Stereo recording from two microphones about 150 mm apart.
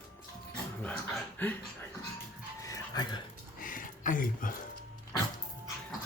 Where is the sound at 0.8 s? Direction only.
10° left (ahead or behind).